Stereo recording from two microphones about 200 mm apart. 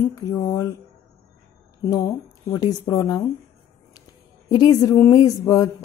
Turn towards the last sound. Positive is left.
turn(degrees=20)  # may be behind; listen again after turning